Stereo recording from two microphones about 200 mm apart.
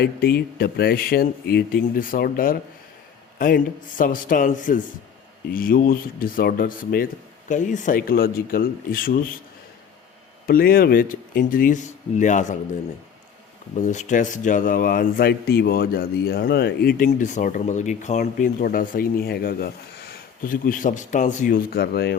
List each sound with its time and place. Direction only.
0.0 s a man's voice: 50° left (ahead or behind)
10.4 s a man's voice: 50° left (ahead or behind)
13.7 s a man's voice: 35° left (ahead or behind); by 22.2 s 55° left (ahead or behind)